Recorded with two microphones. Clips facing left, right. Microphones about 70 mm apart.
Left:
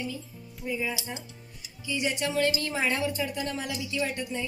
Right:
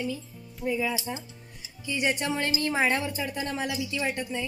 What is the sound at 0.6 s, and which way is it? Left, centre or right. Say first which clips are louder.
Speech: right 4 dB; right.